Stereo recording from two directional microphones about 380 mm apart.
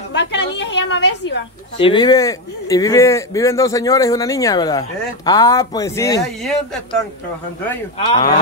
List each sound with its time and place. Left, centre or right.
0.1 s a woman's voice: left
1.8 s speech: centre